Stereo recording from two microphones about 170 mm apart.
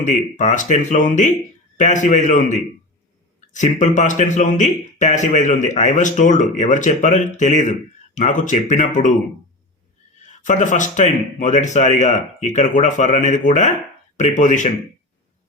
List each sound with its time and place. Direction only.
0.0 s speech: 45° left (ahead or behind)
10.4 s speech: 45° left (ahead or behind)